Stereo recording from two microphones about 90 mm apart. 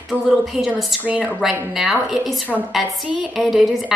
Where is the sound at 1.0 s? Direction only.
15° right (ahead or behind).